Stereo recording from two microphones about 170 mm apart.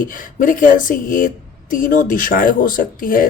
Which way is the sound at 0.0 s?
50° left (ahead or behind).